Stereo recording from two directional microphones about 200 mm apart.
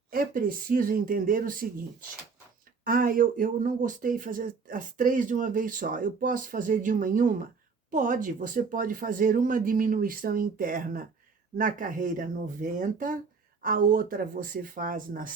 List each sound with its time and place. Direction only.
0.1 s speech: 45° right (ahead or behind)